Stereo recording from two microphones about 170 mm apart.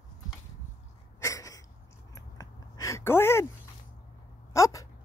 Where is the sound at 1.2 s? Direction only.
15° left (ahead or behind).